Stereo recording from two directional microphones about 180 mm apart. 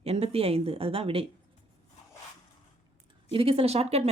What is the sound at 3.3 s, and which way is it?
Speech, 30° right (ahead or behind).